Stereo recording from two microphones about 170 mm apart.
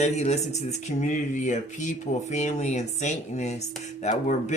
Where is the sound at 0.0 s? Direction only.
40° left (ahead or behind).